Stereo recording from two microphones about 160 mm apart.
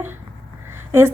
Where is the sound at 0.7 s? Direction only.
15° right (ahead or behind).